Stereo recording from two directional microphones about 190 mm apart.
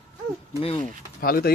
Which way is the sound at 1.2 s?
50° left (ahead or behind).